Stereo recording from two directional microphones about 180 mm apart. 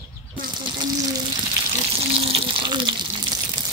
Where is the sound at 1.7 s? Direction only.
35° right (ahead or behind).